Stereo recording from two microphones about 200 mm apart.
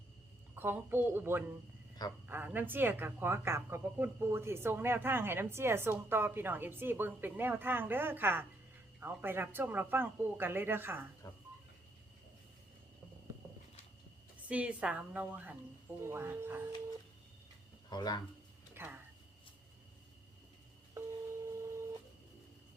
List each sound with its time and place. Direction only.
0.5 s a woman's voice: 10° right (ahead or behind)
11.2 s speech: 20° left (ahead or behind)
14.4 s a woman's voice: 5° right (ahead or behind)
17.8 s speech: 20° left (ahead or behind)
18.7 s a sound: 10° right (ahead or behind)
21.5 s a sound: 15° right (ahead or behind)